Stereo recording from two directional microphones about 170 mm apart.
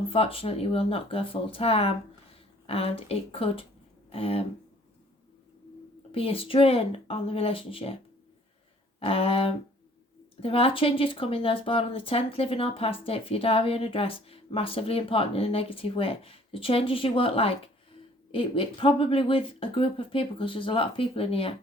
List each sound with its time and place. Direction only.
0.1 s speech: 35° left (ahead or behind)
6.1 s speech: 35° left (ahead or behind)
9.0 s speech: 35° left (ahead or behind)